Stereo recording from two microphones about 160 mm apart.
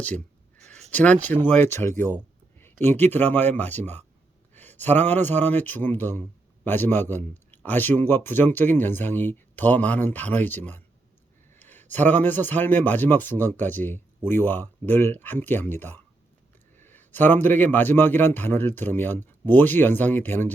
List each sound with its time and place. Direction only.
0.9 s speech: 10° left (ahead or behind)